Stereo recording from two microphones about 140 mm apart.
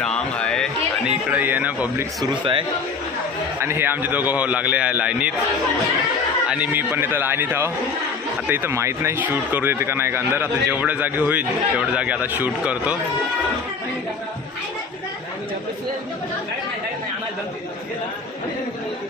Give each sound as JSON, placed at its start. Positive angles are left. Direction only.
{"t": 0.0, "sound": "a sound", "side_deg": 5}
{"t": 1.0, "sound": "speech", "side_deg": -10}
{"t": 2.2, "sound": "a man's voice", "side_deg": -35}
{"t": 3.5, "sound": "speech", "side_deg": -15}
{"t": 6.5, "sound": "speech", "side_deg": -10}